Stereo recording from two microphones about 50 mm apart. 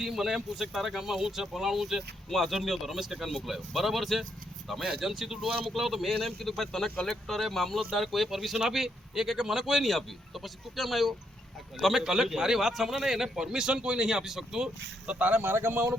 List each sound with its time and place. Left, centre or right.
0.0 s a man's voice: centre
15.0 s speech: right